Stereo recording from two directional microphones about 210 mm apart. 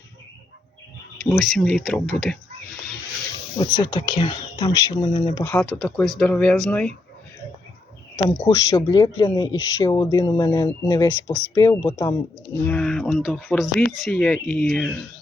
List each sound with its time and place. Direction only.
1.2 s speech: centre (ahead or behind)
3.6 s speech: 20° left (ahead or behind); by 6.9 s 5° left (ahead or behind)
8.1 s speech: 15° left (ahead or behind)
12.6 s speech: 5° left (ahead or behind)